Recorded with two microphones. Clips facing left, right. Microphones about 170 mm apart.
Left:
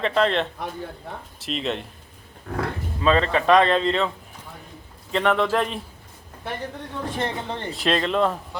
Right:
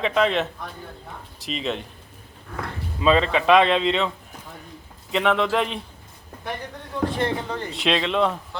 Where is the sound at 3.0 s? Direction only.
5° right (ahead or behind).